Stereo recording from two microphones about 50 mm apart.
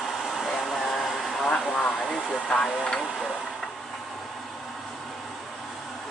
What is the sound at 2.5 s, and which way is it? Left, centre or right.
Speech, centre.